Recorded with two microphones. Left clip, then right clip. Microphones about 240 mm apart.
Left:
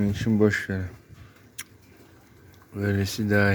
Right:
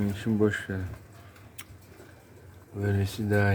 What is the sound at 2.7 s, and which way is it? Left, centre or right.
Speech, centre.